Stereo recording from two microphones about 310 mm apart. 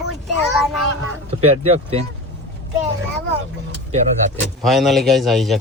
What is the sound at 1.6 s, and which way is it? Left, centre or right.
Speech, centre.